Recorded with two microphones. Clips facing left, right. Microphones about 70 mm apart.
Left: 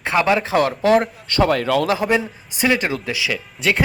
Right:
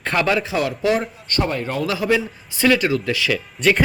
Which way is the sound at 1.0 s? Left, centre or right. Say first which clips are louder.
Left 4 dB; left.